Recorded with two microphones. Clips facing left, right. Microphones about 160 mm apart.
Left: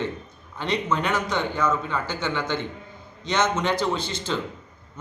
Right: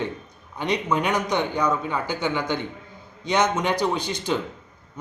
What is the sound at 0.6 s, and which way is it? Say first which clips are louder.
Speech: right 2 dB; 15° right (ahead or behind).